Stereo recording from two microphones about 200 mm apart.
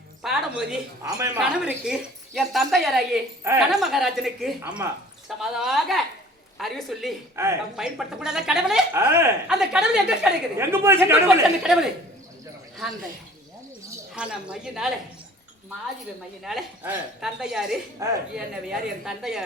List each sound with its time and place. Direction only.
0.2 s music: 5° right (ahead or behind)
1.0 s speech: 15° right (ahead or behind)
1.4 s speech: 5° right (ahead or behind)
4.6 s speech: 10° right (ahead or behind)
5.4 s speech: centre (ahead or behind)
7.4 s speech: 15° right (ahead or behind)
7.8 s speech: 5° right (ahead or behind)
14.2 s speech: 5° right (ahead or behind)
16.4 s speech: centre (ahead or behind)
18.0 s speech: 15° right (ahead or behind)
18.3 s speech: 5° right (ahead or behind)